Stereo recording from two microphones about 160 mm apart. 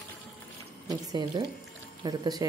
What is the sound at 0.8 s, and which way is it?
Speech, 25° right (ahead or behind).